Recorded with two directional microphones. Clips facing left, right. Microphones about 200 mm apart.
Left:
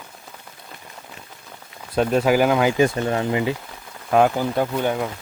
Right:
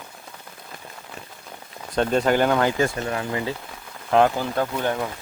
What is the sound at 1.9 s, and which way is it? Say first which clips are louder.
Speech: left 2 dB; 5° left (ahead or behind).